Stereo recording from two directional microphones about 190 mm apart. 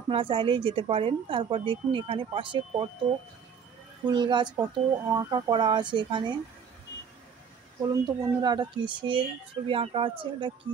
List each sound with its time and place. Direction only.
0.1 s a woman's voice: 25° right (ahead or behind)
4.0 s a woman's voice: 25° right (ahead or behind)
7.9 s a woman's voice: 20° right (ahead or behind)